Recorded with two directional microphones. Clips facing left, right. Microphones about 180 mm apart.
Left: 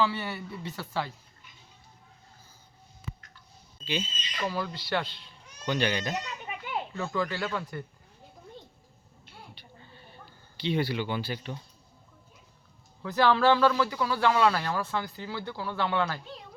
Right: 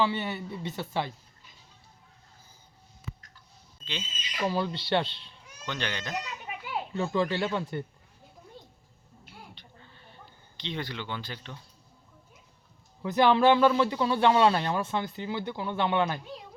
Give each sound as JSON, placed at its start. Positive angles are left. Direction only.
{"t": 0.0, "sound": "speech", "side_deg": -20}
{"t": 4.2, "sound": "speech", "side_deg": -10}
{"t": 4.4, "sound": "speech", "side_deg": -25}
{"t": 5.6, "sound": "speech", "side_deg": 10}
{"t": 6.2, "sound": "a sound", "side_deg": -5}
{"t": 6.9, "sound": "speech", "side_deg": -25}
{"t": 9.6, "sound": "a sound", "side_deg": 10}
{"t": 10.6, "sound": "speech", "side_deg": 10}
{"t": 13.0, "sound": "speech", "side_deg": -20}